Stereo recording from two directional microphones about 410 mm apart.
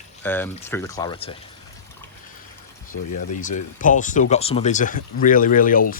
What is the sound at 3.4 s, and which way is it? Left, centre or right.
Speech, centre.